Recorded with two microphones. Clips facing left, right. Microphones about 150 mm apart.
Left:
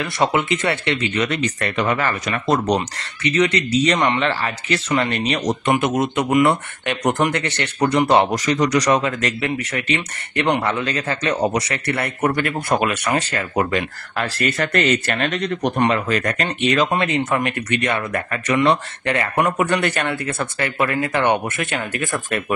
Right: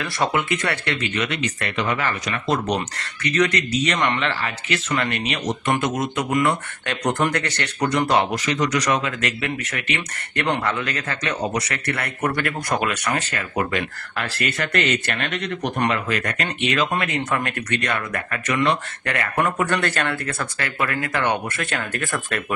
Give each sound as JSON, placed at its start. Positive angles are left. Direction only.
{"t": 0.0, "sound": "speech", "side_deg": 20}
{"t": 1.2, "sound": "speech", "side_deg": 40}
{"t": 3.3, "sound": "speech", "side_deg": 25}
{"t": 5.9, "sound": "speech", "side_deg": 20}
{"t": 8.3, "sound": "speech", "side_deg": 40}
{"t": 13.3, "sound": "speech", "side_deg": 35}
{"t": 17.0, "sound": "speech", "side_deg": 25}